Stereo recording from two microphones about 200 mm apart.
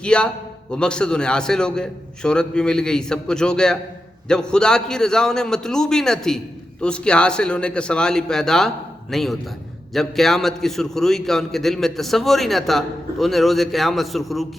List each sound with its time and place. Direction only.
0.0 s a man's voice: 5° left (ahead or behind)